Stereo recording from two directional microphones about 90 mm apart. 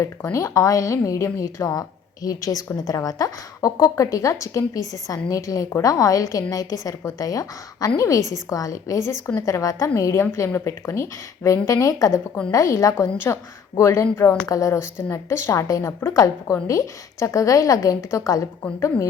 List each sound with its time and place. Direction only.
0.0 s a woman's voice: 35° left (ahead or behind)
9.0 s a woman's voice: 30° left (ahead or behind)